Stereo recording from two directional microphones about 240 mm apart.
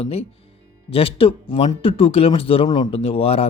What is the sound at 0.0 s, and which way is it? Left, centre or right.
Speech, left.